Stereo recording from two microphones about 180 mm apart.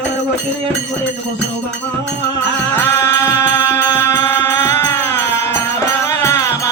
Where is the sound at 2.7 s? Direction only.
15° left (ahead or behind).